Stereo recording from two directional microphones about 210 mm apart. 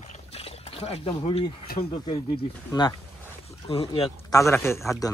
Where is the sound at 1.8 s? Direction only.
25° left (ahead or behind).